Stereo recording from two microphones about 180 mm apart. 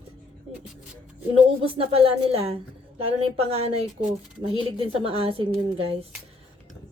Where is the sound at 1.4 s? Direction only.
30° right (ahead or behind).